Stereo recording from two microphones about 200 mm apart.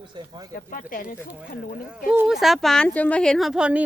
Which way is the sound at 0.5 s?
45° left (ahead or behind).